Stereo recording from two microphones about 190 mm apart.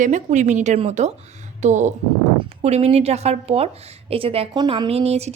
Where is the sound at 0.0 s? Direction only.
40° right (ahead or behind).